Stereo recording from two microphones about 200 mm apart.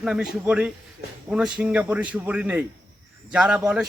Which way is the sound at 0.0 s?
5° right (ahead or behind).